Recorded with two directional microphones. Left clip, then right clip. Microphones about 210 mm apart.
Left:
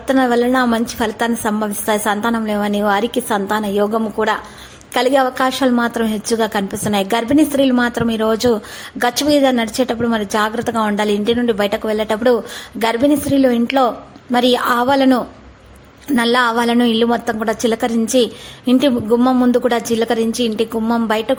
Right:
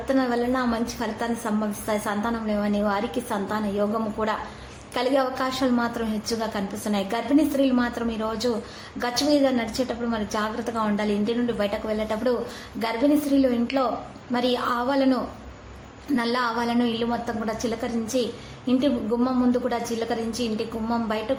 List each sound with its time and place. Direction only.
0.1 s a woman's voice: 40° left (ahead or behind)